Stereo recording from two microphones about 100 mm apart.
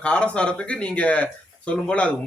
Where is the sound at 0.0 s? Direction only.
10° left (ahead or behind).